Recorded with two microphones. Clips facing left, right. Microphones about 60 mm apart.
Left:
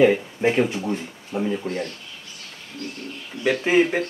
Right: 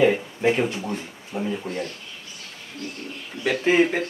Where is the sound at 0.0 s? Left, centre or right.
Centre.